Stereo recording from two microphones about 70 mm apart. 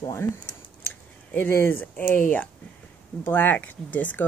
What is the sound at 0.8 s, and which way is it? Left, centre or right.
Speech, left.